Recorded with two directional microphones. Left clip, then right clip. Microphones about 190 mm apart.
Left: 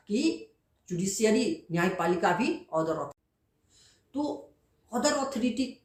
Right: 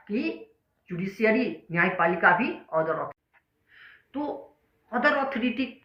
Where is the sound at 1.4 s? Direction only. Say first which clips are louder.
Right 3 dB; 50° left (ahead or behind).